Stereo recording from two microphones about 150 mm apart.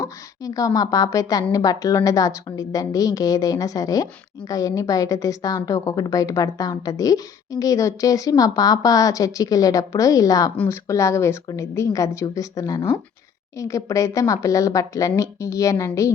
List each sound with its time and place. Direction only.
0.0 s a woman's voice: 25° left (ahead or behind)